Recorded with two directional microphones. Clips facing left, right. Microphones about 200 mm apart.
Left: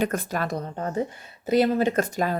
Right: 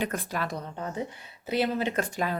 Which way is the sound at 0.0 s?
45° left (ahead or behind).